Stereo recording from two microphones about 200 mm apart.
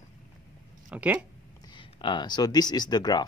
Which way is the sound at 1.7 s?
25° left (ahead or behind).